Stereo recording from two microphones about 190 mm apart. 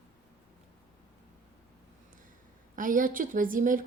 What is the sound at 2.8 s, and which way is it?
A woman's voice, 45° right (ahead or behind).